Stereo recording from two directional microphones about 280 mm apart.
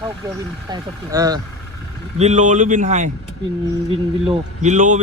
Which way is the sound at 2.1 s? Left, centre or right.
Right.